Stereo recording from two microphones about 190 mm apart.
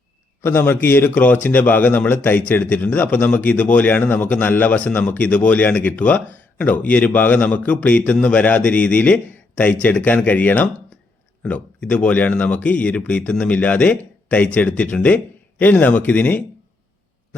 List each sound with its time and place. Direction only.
0.4 s speech: 10° left (ahead or behind)